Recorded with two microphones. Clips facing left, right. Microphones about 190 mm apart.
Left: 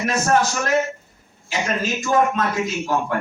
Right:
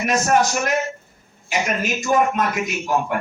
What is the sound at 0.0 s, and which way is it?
A man's voice, 15° right (ahead or behind).